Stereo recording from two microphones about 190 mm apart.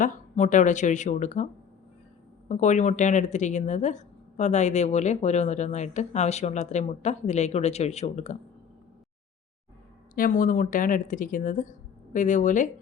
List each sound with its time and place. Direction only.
0.0 s speech: 40° left (ahead or behind)
2.5 s speech: 40° left (ahead or behind)
10.2 s a woman's voice: 45° left (ahead or behind)